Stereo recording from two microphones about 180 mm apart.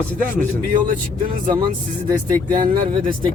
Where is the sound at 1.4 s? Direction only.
25° right (ahead or behind).